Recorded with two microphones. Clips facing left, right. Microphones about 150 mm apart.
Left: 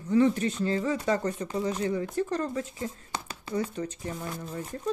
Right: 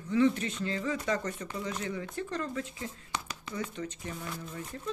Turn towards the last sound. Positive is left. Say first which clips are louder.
# left 4 dB
turn(degrees=35)  # may be behind; listen again after turning